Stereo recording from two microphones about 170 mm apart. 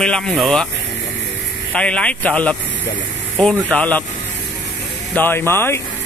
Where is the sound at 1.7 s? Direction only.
5° left (ahead or behind).